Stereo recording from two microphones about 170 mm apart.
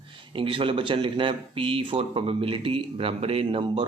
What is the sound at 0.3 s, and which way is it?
Speech, 30° right (ahead or behind).